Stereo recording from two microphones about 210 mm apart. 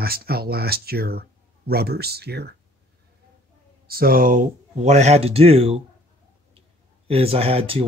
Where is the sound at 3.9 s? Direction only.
45° right (ahead or behind); by 5.8 s 25° right (ahead or behind).